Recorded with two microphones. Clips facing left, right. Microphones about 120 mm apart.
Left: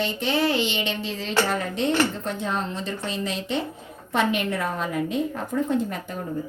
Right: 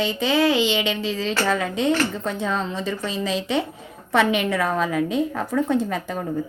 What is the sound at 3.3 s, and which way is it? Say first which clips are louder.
A woman's voice: right 4 dB; 90° right.